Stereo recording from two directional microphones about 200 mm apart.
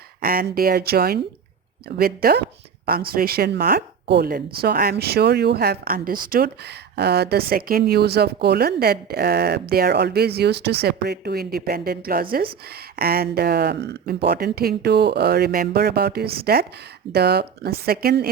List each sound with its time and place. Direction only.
0.2 s speech: 45° right (ahead or behind)